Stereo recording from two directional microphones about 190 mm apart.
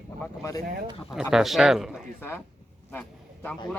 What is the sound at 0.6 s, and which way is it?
Speech, 50° right (ahead or behind).